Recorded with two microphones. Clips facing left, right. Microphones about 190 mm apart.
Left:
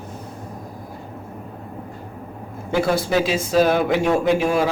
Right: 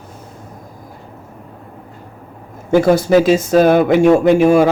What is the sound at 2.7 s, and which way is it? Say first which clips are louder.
Speech: right 9 dB; 45° right (ahead or behind).